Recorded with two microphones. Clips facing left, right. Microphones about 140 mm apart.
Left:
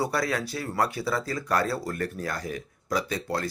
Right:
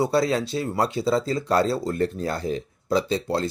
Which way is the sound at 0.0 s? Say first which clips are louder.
Right 6 dB; 25° right (ahead or behind).